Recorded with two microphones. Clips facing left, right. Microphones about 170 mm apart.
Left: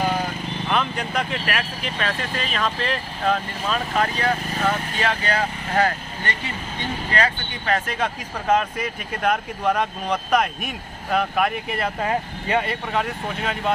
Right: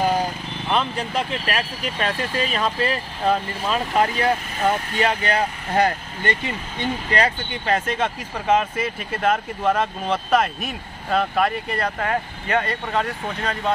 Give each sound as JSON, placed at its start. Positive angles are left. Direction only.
{"t": 0.7, "sound": "speech", "side_deg": -30}
{"t": 2.6, "sound": "speech", "side_deg": -10}
{"t": 8.0, "sound": "speech", "side_deg": -5}
{"t": 12.0, "sound": "speech", "side_deg": 15}
{"t": 12.6, "sound": "speech", "side_deg": 5}